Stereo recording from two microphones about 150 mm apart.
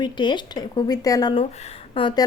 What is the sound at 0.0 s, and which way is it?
A woman's voice, 30° left (ahead or behind).